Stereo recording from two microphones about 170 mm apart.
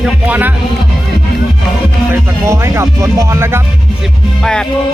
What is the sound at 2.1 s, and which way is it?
Speech, 15° right (ahead or behind).